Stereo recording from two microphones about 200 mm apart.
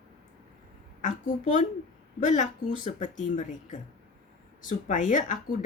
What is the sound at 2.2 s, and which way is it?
Speech, 40° left (ahead or behind).